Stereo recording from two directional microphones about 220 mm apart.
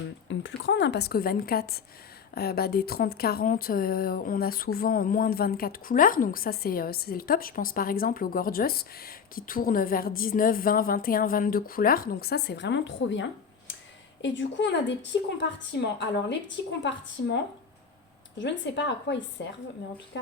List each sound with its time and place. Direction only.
0.3 s a woman's voice: 55° left (ahead or behind)